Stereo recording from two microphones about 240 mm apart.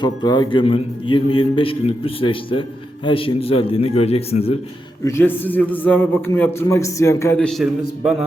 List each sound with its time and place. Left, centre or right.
0.0 s a man's voice: centre
5.0 s a man's voice: centre